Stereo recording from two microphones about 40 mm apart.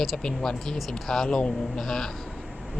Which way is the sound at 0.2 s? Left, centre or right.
Centre.